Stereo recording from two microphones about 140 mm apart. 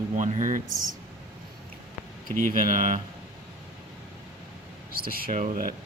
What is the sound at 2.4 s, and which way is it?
Speech, 70° right (ahead or behind).